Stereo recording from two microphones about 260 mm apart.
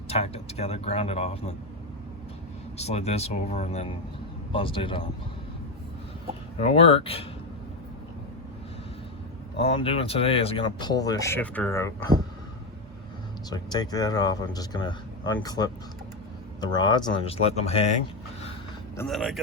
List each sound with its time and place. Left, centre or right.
0.1 s speech: left
2.7 s speech: left
6.6 s speech: left
9.6 s speech: left
13.5 s speech: centre
18.9 s speech: centre